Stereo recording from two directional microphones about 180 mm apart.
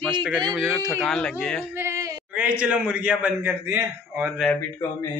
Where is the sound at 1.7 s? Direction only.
15° right (ahead or behind).